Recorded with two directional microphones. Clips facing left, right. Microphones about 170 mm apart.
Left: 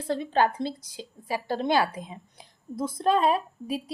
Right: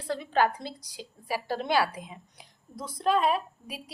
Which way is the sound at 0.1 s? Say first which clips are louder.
Left 2 dB; 25° left (ahead or behind).